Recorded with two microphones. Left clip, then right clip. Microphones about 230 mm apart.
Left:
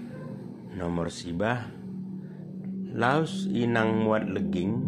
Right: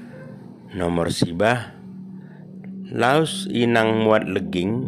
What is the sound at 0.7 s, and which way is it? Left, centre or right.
A man's voice, right.